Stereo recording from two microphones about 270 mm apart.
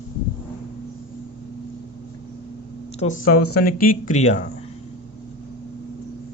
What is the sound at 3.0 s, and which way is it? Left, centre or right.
Speech, left.